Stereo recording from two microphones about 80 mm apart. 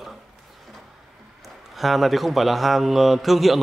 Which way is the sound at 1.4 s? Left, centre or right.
Centre.